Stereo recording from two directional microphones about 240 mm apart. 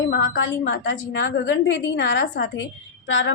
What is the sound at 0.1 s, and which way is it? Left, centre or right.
A woman's voice, left.